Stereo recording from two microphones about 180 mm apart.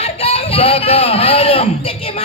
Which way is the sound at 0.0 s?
35° left (ahead or behind).